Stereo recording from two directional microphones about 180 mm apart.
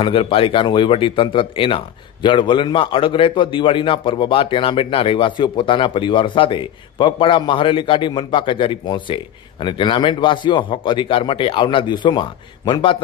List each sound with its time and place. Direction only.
0.0 s a man's voice: 30° left (ahead or behind)